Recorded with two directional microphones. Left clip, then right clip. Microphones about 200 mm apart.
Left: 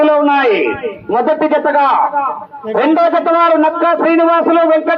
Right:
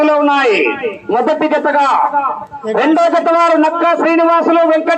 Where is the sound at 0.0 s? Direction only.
35° right (ahead or behind).